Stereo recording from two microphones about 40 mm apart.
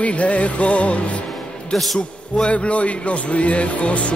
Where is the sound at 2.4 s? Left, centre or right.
Left.